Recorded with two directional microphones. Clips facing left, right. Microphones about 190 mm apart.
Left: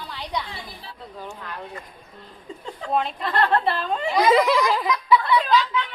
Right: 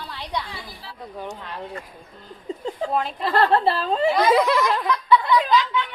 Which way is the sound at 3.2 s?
30° right (ahead or behind).